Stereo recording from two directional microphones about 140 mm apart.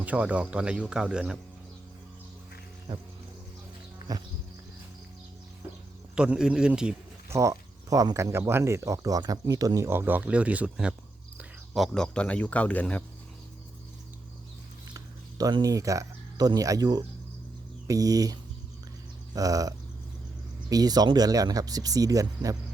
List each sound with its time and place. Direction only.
0.0 s speech: 10° right (ahead or behind)
4.1 s speech: 25° right (ahead or behind)
6.1 s speech: 5° right (ahead or behind)
7.3 s speech: 20° right (ahead or behind); by 13.1 s 10° left (ahead or behind)
14.9 s speech: 25° right (ahead or behind)
19.3 s a sound: 25° right (ahead or behind)
20.7 s speech: 25° right (ahead or behind)